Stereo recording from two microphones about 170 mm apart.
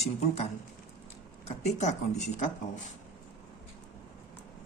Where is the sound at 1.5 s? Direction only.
40° left (ahead or behind).